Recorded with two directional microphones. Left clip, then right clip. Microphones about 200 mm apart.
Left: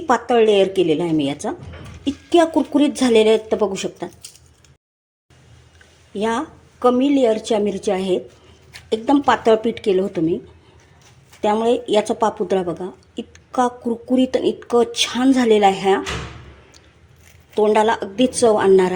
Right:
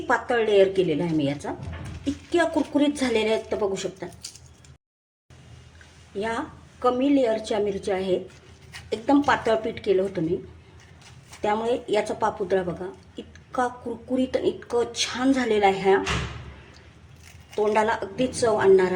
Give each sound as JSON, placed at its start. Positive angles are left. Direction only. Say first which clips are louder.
{"t": 0.1, "sound": "a woman's voice", "louder": "left 7 dB", "side_deg": 35}
{"t": 6.1, "sound": "a woman's voice", "louder": "left 7 dB", "side_deg": 35}
{"t": 11.3, "sound": "a woman's voice", "louder": "left 7 dB", "side_deg": 35}
{"t": 13.1, "sound": "a sound", "louder": "left 7 dB", "side_deg": 35}
{"t": 14.1, "sound": "a woman's voice", "louder": "left 6 dB", "side_deg": 35}
{"t": 17.5, "sound": "a woman's voice", "louder": "left 7 dB", "side_deg": 40}